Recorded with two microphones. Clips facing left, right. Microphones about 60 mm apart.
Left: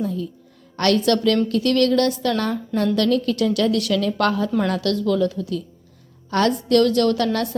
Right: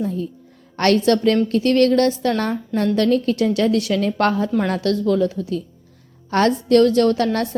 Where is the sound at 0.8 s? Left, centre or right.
Right.